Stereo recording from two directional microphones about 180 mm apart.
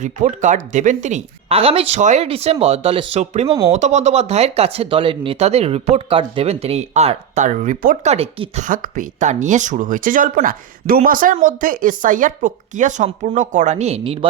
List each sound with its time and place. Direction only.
0.0 s speech: 45° right (ahead or behind)
8.1 s speech: 35° right (ahead or behind)